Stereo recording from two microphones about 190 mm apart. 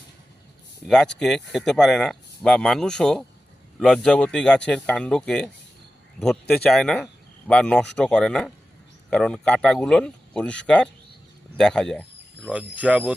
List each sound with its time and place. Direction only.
0.9 s speech: 5° left (ahead or behind)
6.5 s speech: 5° left (ahead or behind)